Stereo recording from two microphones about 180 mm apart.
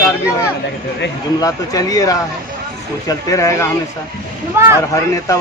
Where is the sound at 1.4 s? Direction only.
20° left (ahead or behind).